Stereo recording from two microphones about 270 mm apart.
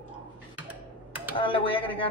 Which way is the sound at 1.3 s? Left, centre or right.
Centre.